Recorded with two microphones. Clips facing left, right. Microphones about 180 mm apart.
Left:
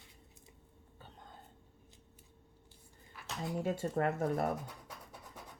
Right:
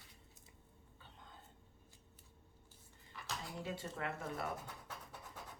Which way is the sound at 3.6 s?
45° left (ahead or behind).